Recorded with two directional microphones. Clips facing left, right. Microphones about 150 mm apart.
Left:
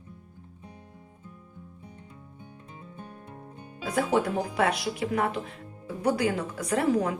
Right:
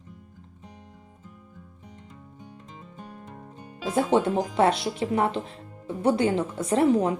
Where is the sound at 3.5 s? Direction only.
25° right (ahead or behind).